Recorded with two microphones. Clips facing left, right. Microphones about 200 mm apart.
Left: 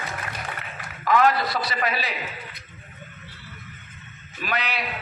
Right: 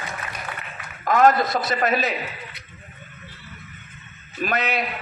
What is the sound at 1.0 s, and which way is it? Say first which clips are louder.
A man's voice: right 3 dB; 45° right (ahead or behind).